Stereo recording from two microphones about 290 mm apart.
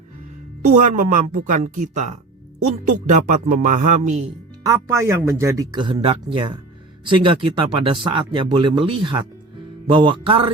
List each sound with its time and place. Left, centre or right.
0.6 s speech: right
4.6 s speech: centre